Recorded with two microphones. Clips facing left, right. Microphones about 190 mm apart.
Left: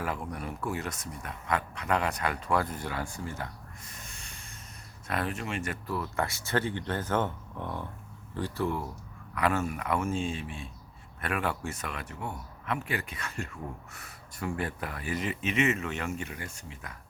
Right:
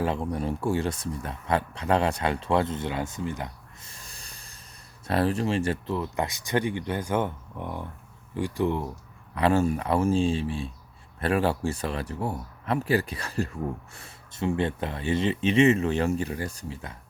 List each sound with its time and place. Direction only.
0.0 s speech: 30° right (ahead or behind)
3.9 s sanding: 35° right (ahead or behind)
5.0 s speech: 35° right (ahead or behind)
9.3 s speech: 30° right (ahead or behind)